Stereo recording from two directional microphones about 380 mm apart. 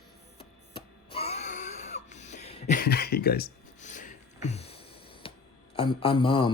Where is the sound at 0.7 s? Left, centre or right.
Centre.